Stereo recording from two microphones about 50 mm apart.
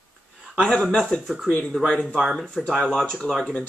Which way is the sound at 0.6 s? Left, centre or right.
Centre.